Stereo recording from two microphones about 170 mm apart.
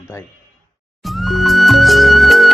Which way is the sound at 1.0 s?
Centre (ahead or behind).